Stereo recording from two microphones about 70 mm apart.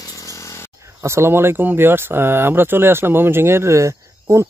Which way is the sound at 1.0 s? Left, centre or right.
Right.